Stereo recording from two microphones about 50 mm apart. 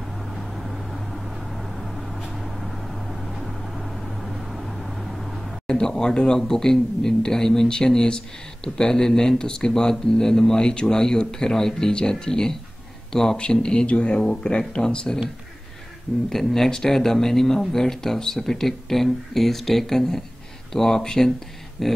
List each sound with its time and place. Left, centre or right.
0.4 s vehicle: centre
5.7 s speech: centre
16.3 s speech: centre
21.8 s a sound: centre